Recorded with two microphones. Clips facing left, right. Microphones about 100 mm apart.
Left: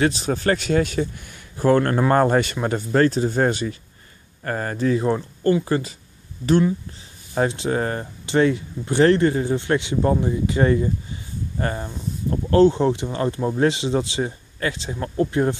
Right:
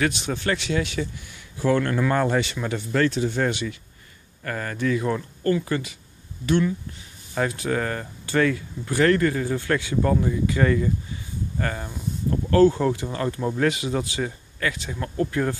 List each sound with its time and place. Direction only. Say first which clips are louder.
0.0 s speech: left 4 dB; 35° left (ahead or behind)